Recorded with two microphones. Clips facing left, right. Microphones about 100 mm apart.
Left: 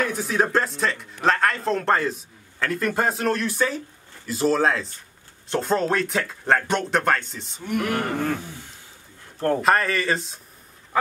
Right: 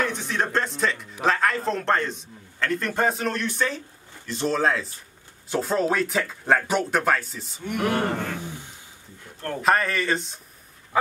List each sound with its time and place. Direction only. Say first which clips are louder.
0.0 s speech: left 3 dB; 5° left (ahead or behind)
7.8 s a sound: right 4 dB; 25° right (ahead or behind)
9.6 s speech: right 2 dB; centre (ahead or behind)